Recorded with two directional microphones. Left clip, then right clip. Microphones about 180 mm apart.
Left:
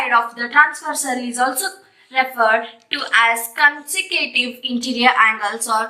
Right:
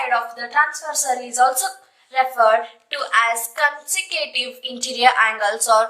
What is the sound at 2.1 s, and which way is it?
A woman's voice, 60° right (ahead or behind).